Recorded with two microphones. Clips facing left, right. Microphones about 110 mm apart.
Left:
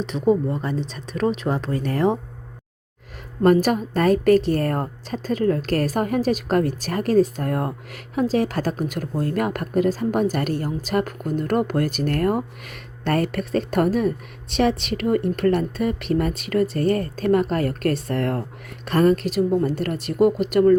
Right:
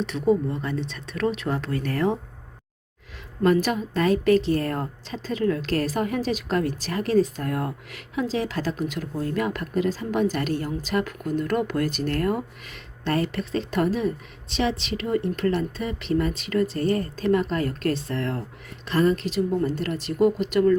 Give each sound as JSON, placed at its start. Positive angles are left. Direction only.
{"t": 0.0, "sound": "speech", "side_deg": 35}
{"t": 3.4, "sound": "a woman's voice", "side_deg": 45}